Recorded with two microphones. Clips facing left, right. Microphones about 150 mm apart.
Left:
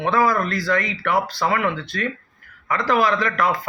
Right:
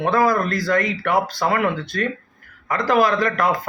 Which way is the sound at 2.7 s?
40° right (ahead or behind).